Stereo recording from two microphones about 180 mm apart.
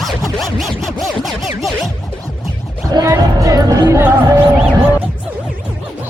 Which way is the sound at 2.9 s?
15° right (ahead or behind).